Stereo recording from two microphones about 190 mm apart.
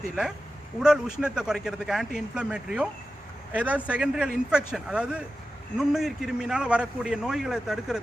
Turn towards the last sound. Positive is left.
turn(degrees=0)  # may be behind; listen again after turning